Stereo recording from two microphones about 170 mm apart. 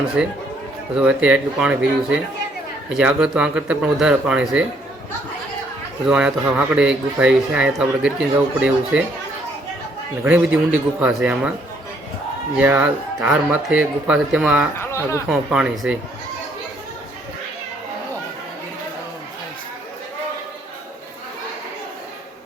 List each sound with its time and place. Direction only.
0.2 s speech: 5° right (ahead or behind)
6.1 s speech: 5° right (ahead or behind)
10.2 s speech: 10° right (ahead or behind)
12.5 s speech: 10° right (ahead or behind)
14.8 s a sound: 15° left (ahead or behind)
15.3 s speech: 5° right (ahead or behind)